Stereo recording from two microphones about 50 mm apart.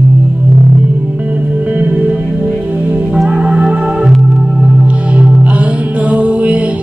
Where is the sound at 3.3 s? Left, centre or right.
Centre.